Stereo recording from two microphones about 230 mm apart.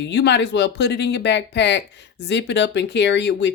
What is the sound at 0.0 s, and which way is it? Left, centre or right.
Speech, left.